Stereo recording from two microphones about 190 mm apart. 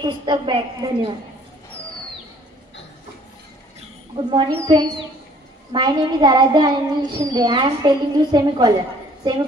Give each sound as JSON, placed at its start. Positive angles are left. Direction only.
{"t": 0.0, "sound": "child singing", "side_deg": -25}
{"t": 4.2, "sound": "child singing", "side_deg": -25}